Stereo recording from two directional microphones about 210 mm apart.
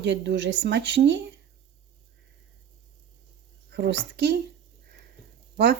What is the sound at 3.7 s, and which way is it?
Speech, 50° right (ahead or behind).